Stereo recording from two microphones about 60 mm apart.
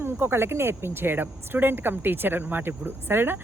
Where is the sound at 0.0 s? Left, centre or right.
Right.